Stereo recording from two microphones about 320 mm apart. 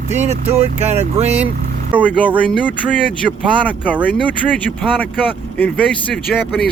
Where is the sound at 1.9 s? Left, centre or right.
Centre.